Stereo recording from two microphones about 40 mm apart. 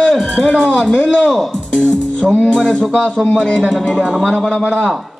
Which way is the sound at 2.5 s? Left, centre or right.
Centre.